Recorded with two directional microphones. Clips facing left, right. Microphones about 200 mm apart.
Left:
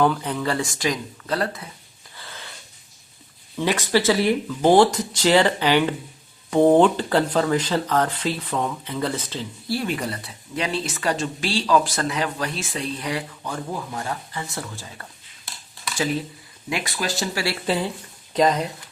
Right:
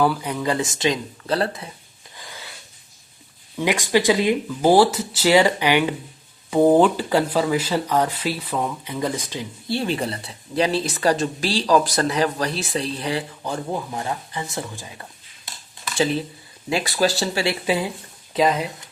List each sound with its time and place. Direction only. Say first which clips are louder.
0.0 s speech: even; 10° right (ahead or behind); by 1.7 s 25° right (ahead or behind)
2.1 s wheeze: right 1 dB; 15° right (ahead or behind)
3.6 s speech: right 1 dB; 15° right (ahead or behind)
4.6 s speech: even; 5° right (ahead or behind)
9.7 s a woman's voice: right 2 dB; 30° right (ahead or behind)
16.6 s a woman's voice: right 6 dB; 30° right (ahead or behind)
17.4 s speech: right 2 dB; 20° right (ahead or behind)
18.3 s speech: even; 5° right (ahead or behind)